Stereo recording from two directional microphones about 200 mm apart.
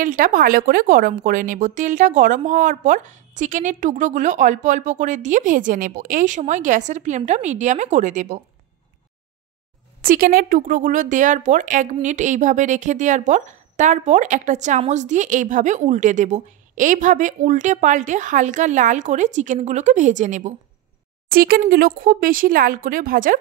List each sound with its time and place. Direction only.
0.0 s speech: 40° right (ahead or behind)
10.0 s speech: 45° right (ahead or behind)